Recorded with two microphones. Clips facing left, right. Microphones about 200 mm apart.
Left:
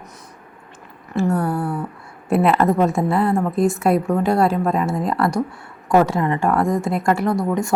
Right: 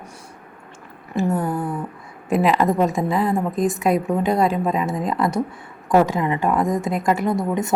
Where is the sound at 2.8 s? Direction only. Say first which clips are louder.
Left 2 dB; 15° right (ahead or behind).